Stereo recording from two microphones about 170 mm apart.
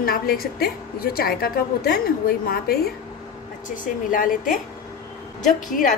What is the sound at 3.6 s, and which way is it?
Speech, 50° left (ahead or behind).